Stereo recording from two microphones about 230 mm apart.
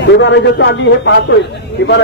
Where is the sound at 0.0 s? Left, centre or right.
Left.